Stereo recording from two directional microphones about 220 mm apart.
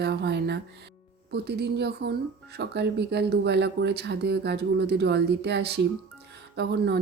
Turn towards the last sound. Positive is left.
turn(degrees=-50)  # may be behind; listen again after turning